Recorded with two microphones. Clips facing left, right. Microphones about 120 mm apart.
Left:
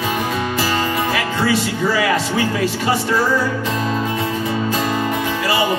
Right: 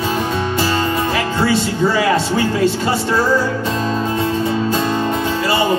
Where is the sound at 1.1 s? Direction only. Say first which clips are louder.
Right 2 dB; 30° right (ahead or behind).